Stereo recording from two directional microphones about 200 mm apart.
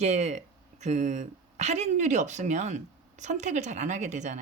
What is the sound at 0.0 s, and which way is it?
Speech, 35° right (ahead or behind).